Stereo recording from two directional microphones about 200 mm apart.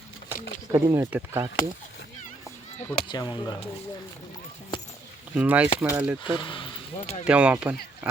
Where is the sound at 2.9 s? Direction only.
20° left (ahead or behind).